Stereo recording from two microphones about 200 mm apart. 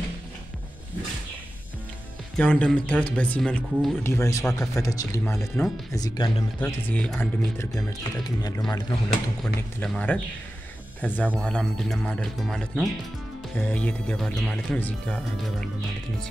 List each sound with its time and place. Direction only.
2.3 s speech: 5° left (ahead or behind)
6.9 s speech: 5° left (ahead or behind)
7.5 s speech: 20° left (ahead or behind)
9.4 s speech: 5° left (ahead or behind)